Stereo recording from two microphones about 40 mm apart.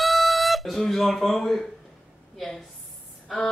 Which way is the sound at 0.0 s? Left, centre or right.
Centre.